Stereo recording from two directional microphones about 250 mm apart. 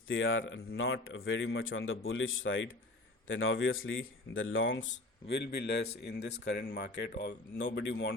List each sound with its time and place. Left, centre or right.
0.1 s speech: left
5.3 s speech: left